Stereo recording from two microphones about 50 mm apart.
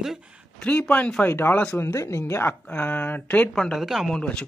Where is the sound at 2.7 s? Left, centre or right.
Left.